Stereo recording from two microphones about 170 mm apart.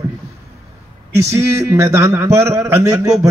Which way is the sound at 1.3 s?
15° right (ahead or behind).